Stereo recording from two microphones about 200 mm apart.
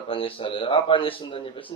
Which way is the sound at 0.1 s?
25° left (ahead or behind).